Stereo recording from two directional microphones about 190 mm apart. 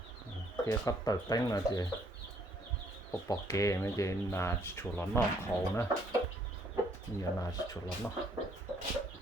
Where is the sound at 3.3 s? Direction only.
15° left (ahead or behind).